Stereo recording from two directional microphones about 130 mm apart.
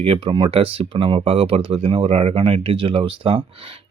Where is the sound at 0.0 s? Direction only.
45° right (ahead or behind).